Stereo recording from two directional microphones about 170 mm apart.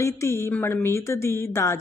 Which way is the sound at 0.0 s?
15° left (ahead or behind).